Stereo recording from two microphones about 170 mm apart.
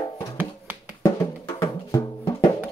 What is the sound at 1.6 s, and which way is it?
Music, 20° left (ahead or behind).